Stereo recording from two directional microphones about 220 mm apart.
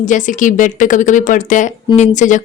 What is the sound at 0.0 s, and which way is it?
A woman's voice, 35° left (ahead or behind).